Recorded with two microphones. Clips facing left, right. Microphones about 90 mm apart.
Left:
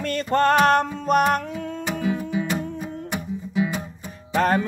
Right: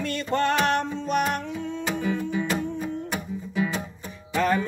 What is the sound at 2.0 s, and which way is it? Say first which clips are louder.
Music: left 3 dB; 10° left (ahead or behind).